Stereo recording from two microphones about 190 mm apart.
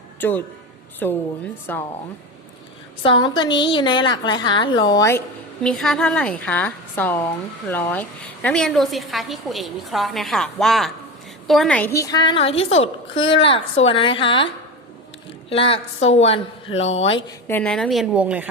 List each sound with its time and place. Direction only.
0.2 s a man's voice: 10° left (ahead or behind)
3.0 s a woman's voice: 25° left (ahead or behind)
5.6 s a woman's voice: centre (ahead or behind); by 14.4 s 25° left (ahead or behind)
15.4 s a woman's voice: 30° left (ahead or behind)
17.5 s a woman's voice: 5° left (ahead or behind)